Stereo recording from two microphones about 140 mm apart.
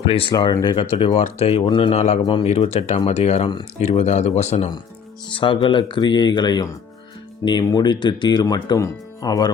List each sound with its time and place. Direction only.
0.1 s speech: 40° left (ahead or behind)
0.3 s speech: 30° left (ahead or behind); by 4.7 s 55° left (ahead or behind)
5.3 s speech: 35° left (ahead or behind)